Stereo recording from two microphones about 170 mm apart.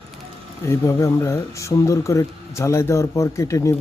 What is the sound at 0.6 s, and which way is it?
Speech, 20° left (ahead or behind).